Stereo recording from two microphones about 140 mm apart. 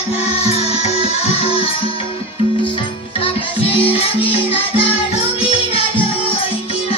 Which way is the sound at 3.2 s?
40° left (ahead or behind).